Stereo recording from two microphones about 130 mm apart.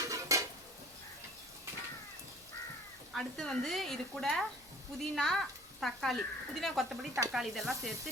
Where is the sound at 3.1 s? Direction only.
Centre (ahead or behind).